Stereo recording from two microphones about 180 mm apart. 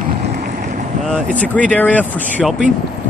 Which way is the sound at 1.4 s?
10° left (ahead or behind).